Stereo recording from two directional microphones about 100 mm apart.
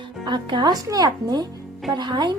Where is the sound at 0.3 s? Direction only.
50° right (ahead or behind).